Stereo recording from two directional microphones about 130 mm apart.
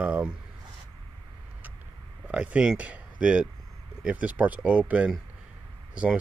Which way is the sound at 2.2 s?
10° right (ahead or behind).